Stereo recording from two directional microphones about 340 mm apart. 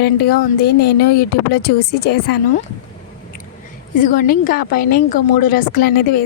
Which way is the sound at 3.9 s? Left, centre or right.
Left.